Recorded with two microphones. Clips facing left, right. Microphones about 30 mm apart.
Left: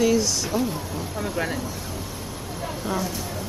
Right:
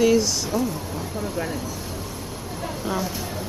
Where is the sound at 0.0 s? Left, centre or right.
Centre.